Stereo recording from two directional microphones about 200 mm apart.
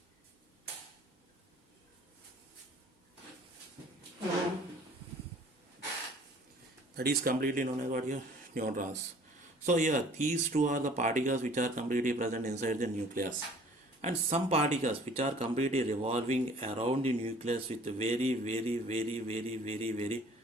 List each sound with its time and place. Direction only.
6.9 s speech: 50° right (ahead or behind); by 20.1 s 30° right (ahead or behind)